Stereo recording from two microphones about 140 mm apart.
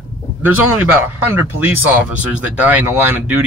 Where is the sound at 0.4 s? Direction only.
10° right (ahead or behind).